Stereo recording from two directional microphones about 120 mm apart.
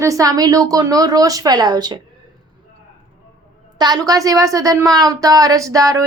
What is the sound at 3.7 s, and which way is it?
A woman's voice, 35° right (ahead or behind).